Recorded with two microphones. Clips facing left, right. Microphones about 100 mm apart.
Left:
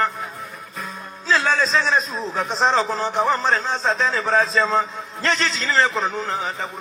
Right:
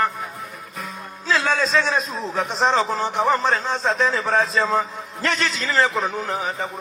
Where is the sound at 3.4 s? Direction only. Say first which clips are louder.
Even; 35° left (ahead or behind).